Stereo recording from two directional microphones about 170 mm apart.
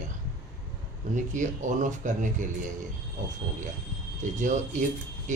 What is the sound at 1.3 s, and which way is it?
Speech, 45° right (ahead or behind).